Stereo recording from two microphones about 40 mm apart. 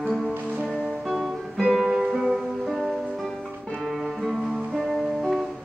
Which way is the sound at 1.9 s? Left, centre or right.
Centre.